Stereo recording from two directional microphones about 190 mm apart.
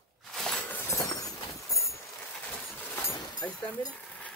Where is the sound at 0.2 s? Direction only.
Centre (ahead or behind).